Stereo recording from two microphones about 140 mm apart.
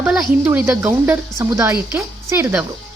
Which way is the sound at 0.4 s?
15° right (ahead or behind).